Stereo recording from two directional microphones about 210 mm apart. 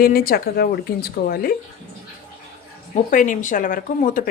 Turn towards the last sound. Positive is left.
turn(degrees=40)  # may be behind; listen again after turning